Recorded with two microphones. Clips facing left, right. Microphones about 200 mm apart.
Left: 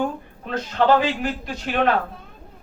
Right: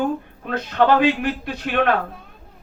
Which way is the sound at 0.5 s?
60° right (ahead or behind).